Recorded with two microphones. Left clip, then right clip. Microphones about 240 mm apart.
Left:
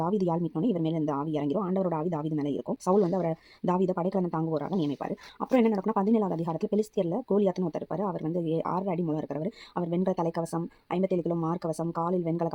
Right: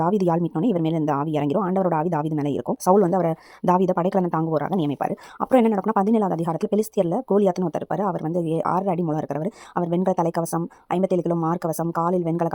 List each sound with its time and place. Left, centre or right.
0.0 s a woman's voice: right